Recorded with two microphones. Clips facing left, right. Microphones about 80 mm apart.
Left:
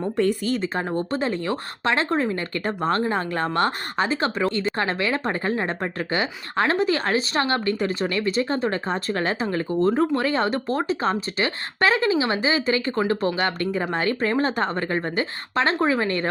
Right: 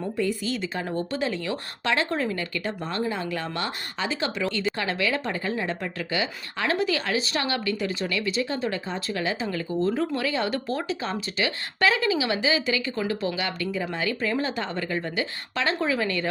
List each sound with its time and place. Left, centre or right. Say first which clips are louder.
0.2 s a woman's voice: left 5 dB; left
0.5 s speech: left 4 dB; left
3.0 s speech: left 4 dB; left